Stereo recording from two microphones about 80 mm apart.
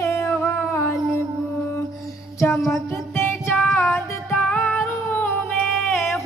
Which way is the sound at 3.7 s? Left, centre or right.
Left.